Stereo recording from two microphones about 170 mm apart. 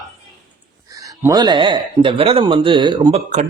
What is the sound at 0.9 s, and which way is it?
Speech, 20° right (ahead or behind).